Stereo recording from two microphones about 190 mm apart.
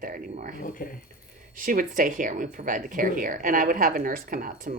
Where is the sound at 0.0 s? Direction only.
45° right (ahead or behind).